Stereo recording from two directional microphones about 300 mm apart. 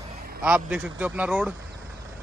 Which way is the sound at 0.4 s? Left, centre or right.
Centre.